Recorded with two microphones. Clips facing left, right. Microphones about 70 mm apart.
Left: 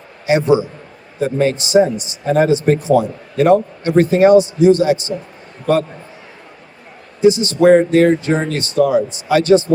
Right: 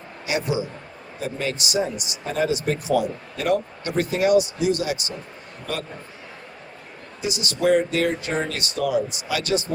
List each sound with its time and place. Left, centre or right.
0.3 s speech: left
7.2 s speech: left